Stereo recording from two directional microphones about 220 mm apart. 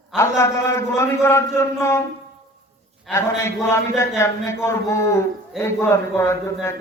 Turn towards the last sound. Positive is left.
turn(degrees=10)  # may be behind; listen again after turning